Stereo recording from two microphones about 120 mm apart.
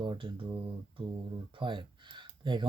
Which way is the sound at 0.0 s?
40° right (ahead or behind).